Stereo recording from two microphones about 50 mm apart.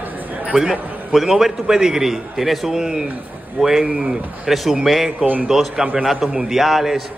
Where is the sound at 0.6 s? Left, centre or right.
Centre.